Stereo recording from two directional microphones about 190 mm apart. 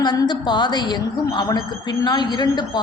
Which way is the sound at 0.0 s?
20° left (ahead or behind).